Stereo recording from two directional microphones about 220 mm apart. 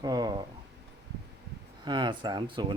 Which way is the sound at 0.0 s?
15° right (ahead or behind).